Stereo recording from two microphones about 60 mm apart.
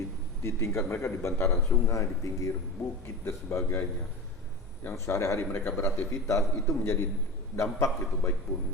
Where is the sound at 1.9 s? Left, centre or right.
Left.